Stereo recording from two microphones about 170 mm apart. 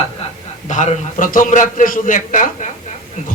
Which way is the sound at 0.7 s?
45° left (ahead or behind).